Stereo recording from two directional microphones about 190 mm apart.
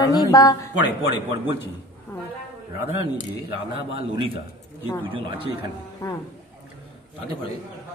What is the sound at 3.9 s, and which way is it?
A man's voice, 25° right (ahead or behind).